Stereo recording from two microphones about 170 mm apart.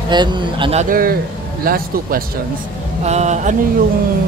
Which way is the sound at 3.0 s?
40° right (ahead or behind).